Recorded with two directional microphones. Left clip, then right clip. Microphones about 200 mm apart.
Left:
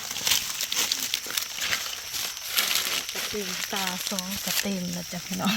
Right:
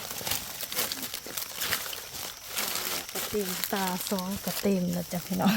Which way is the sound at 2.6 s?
5° right (ahead or behind).